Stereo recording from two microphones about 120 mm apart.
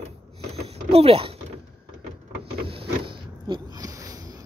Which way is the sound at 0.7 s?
55° right (ahead or behind).